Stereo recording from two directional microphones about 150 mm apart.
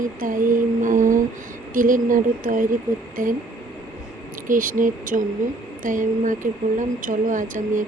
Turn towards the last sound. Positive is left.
turn(degrees=-60)  # may be behind; listen again after turning